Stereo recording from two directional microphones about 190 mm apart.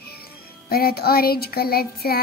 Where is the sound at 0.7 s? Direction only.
55° left (ahead or behind).